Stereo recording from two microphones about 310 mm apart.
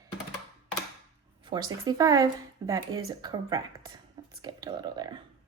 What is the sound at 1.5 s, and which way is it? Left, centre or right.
Speech, centre.